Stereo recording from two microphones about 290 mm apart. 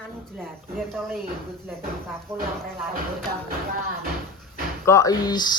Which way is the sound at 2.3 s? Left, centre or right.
Centre.